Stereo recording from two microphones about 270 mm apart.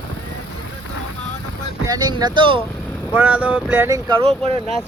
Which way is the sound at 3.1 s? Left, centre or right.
Centre.